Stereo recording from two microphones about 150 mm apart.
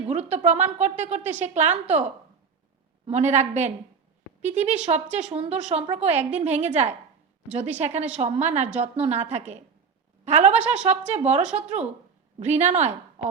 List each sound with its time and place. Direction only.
0.1 s a woman's voice: 45° right (ahead or behind)